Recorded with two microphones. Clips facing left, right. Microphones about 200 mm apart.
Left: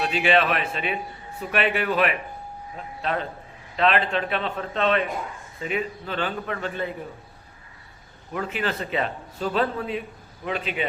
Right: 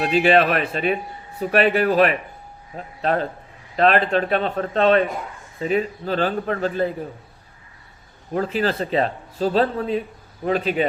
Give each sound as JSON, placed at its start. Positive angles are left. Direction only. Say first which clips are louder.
{"t": 0.0, "sound": "speech", "louder": "right 5 dB", "side_deg": -40}
{"t": 8.3, "sound": "speech", "louder": "right 6 dB", "side_deg": -35}